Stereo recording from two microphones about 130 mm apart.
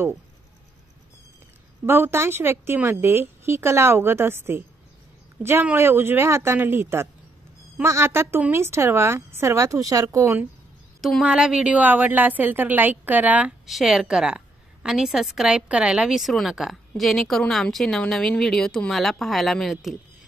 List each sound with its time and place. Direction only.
1.9 s a woman's voice: 20° right (ahead or behind)
11.0 s a woman's voice: centre (ahead or behind)